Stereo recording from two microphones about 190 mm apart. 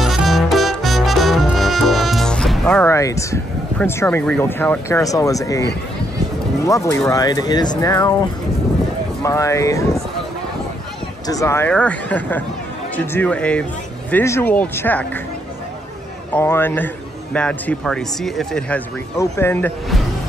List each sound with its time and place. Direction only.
0.0 s music: centre (ahead or behind); by 3.3 s 15° left (ahead or behind)
3.8 s a man's voice: 10° left (ahead or behind)
9.2 s a man's voice: 15° left (ahead or behind)
11.2 s a man's voice: 15° left (ahead or behind)
16.3 s a man's voice: 10° left (ahead or behind)
19.1 s a man's voice: 15° left (ahead or behind)